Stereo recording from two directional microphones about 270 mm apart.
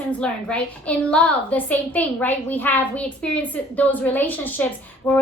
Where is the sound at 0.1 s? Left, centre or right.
Centre.